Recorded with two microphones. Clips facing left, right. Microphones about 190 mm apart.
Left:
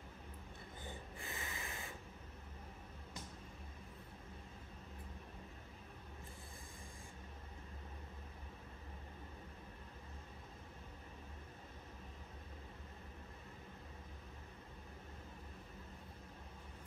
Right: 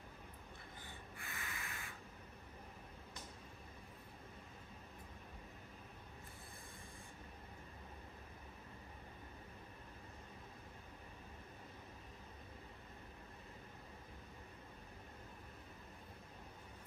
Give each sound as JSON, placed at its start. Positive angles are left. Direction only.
{"t": 1.1, "sound": "snort", "side_deg": 15}